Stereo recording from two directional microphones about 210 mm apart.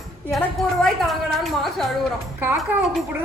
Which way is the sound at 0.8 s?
Centre (ahead or behind).